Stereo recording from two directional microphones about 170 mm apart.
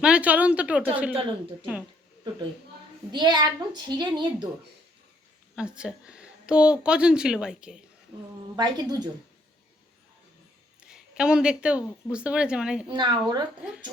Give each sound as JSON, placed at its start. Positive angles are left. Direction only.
{"t": 0.0, "sound": "speech", "side_deg": -5}
{"t": 3.1, "sound": "a child's voice", "side_deg": -25}
{"t": 5.5, "sound": "speech", "side_deg": -5}
{"t": 8.5, "sound": "a child's voice", "side_deg": -25}
{"t": 10.8, "sound": "a sound", "side_deg": -5}
{"t": 12.0, "sound": "speech", "side_deg": -5}
{"t": 12.9, "sound": "a child's voice", "side_deg": -25}